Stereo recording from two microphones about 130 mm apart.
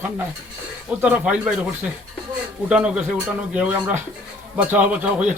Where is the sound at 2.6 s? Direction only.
10° right (ahead or behind).